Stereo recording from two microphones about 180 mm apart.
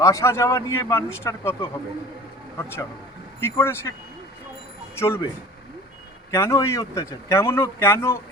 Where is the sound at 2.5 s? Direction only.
15° left (ahead or behind).